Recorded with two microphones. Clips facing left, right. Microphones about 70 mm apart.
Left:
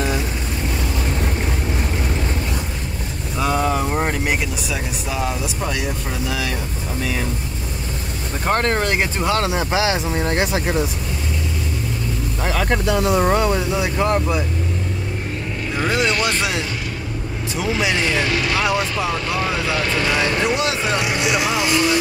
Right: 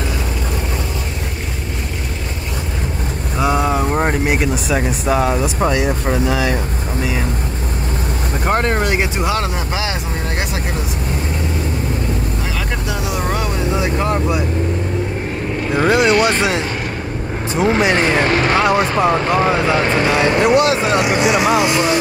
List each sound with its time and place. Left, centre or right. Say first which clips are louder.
3.3 s vehicle: right 3 dB; centre
4.0 s vehicle: right 4 dB; right
4.6 s speech: right 8 dB; right
8.5 s speech: right 2 dB; centre
9.5 s speech: left 3 dB; centre
13.2 s speech: left 4 dB; centre
13.9 s speech: even; centre
15.7 s speech: right 7 dB; right
16.2 s speech: right 6 dB; right
17.6 s speech: right 6 dB; right